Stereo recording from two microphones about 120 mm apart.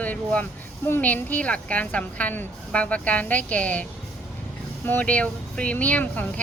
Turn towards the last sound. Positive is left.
turn(degrees=10)  # may be behind; listen again after turning